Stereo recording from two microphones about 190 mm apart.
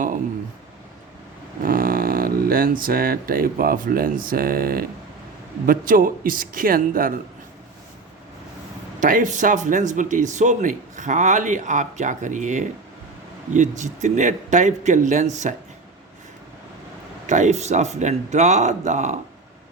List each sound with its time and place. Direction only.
1.6 s speech: 50° right (ahead or behind)
9.0 s speech: 45° right (ahead or behind)
17.2 s speech: 40° right (ahead or behind)